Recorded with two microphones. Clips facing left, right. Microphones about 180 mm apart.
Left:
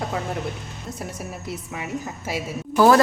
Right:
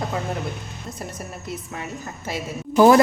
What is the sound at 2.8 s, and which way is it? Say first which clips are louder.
Speech: right 2 dB; 15° right (ahead or behind).